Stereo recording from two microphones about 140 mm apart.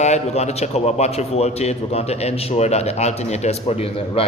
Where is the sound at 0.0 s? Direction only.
55° left (ahead or behind).